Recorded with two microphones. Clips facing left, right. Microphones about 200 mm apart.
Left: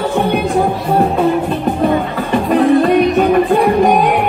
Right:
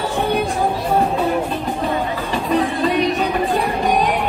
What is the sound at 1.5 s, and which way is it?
Music, 60° left (ahead or behind).